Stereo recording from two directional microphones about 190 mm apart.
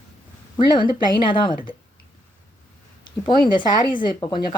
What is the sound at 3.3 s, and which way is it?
Speech, 25° left (ahead or behind).